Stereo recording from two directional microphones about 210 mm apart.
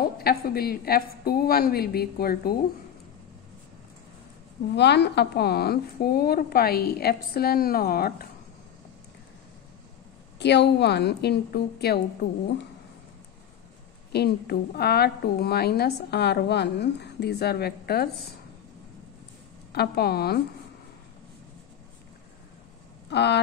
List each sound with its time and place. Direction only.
0.0 s a woman's voice: 45° left (ahead or behind)
4.7 s a woman's voice: 55° left (ahead or behind)
10.4 s a woman's voice: 55° left (ahead or behind)
14.1 s a woman's voice: 50° left (ahead or behind)
19.7 s a woman's voice: 50° left (ahead or behind)
23.0 s speech: 55° left (ahead or behind)